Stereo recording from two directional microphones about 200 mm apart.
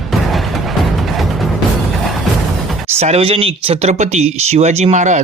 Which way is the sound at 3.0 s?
30° right (ahead or behind).